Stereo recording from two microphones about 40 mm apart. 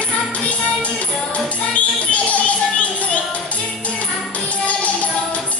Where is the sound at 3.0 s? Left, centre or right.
Left.